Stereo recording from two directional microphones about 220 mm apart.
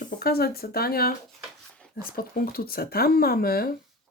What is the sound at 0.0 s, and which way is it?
Speech, 45° left (ahead or behind).